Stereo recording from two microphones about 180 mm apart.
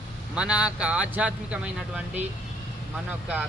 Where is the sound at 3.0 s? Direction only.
5° right (ahead or behind).